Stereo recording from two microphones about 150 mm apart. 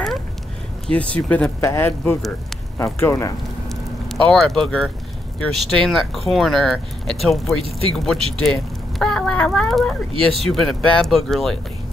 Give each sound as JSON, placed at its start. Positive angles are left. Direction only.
{"t": 0.9, "sound": "speech", "side_deg": 10}
{"t": 3.6, "sound": "a sound", "side_deg": 0}
{"t": 5.7, "sound": "speech", "side_deg": 0}